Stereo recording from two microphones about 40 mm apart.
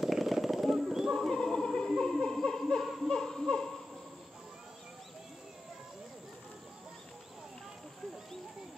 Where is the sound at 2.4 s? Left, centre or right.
Centre.